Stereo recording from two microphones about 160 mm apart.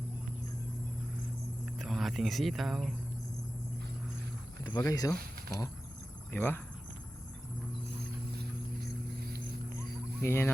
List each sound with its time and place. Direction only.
1.8 s speech: centre (ahead or behind)
4.6 s speech: 25° left (ahead or behind)
10.2 s speech: 15° left (ahead or behind)